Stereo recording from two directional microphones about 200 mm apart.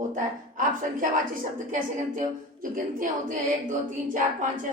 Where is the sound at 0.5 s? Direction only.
40° right (ahead or behind).